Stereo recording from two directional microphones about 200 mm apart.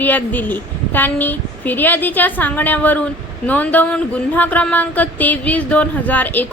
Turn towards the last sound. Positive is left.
turn(degrees=10)  # may be behind; listen again after turning